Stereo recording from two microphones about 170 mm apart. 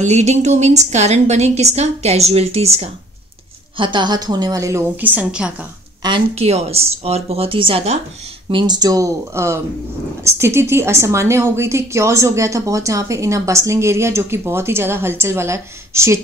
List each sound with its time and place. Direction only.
0.0 s a woman's voice: 40° right (ahead or behind)
3.7 s a woman's voice: 25° right (ahead or behind); by 5.7 s 5° right (ahead or behind)
6.0 s a woman's voice: 30° right (ahead or behind); by 16.2 s 15° right (ahead or behind)